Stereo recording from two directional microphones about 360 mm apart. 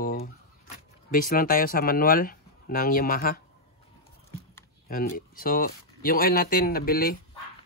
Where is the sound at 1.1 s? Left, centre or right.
Left.